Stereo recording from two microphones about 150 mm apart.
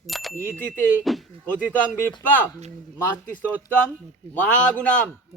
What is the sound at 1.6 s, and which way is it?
Speech, 10° left (ahead or behind).